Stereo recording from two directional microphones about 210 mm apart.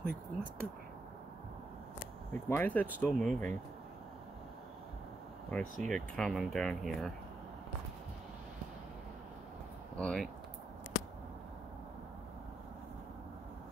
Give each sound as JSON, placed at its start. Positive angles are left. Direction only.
{"t": 0.0, "sound": "speech", "side_deg": -45}
{"t": 2.4, "sound": "speech", "side_deg": 10}
{"t": 5.5, "sound": "speech", "side_deg": 5}
{"t": 9.9, "sound": "speech", "side_deg": 5}